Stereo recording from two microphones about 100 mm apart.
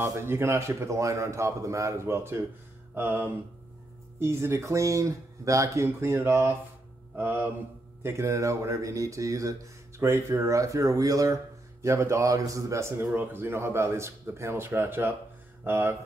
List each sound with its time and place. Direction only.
0.0 s speech: 25° right (ahead or behind)
2.9 s mantra: 20° right (ahead or behind)
4.2 s speech: 25° right (ahead or behind)